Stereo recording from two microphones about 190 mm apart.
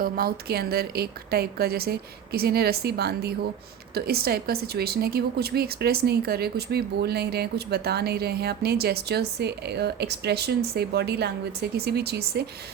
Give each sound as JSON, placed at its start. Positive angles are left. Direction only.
{"t": 0.0, "sound": "a woman's voice", "side_deg": -55}